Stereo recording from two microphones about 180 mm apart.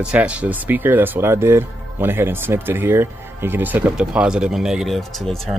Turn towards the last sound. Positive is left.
turn(degrees=0)  # may be behind; listen again after turning